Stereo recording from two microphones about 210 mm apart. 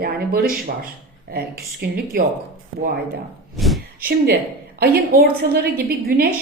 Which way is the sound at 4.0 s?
50° right (ahead or behind).